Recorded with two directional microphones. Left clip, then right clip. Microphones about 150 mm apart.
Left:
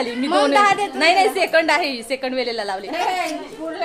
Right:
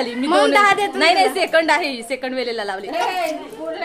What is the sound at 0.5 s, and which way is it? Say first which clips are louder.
Speech: left 1 dB; 90° right.